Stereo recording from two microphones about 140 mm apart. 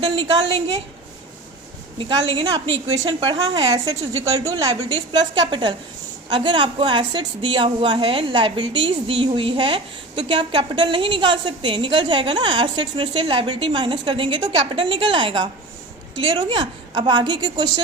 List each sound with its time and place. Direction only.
0.0 s a woman's voice: 40° right (ahead or behind)
2.0 s a woman's voice: 35° right (ahead or behind)